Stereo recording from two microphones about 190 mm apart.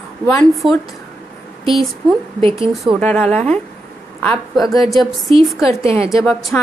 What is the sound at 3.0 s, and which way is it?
A woman's voice, 10° left (ahead or behind).